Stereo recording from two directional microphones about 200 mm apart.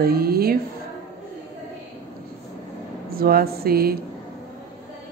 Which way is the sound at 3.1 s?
50° right (ahead or behind).